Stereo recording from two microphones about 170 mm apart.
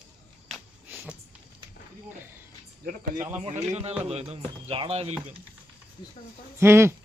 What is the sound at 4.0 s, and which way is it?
Speech, 40° right (ahead or behind).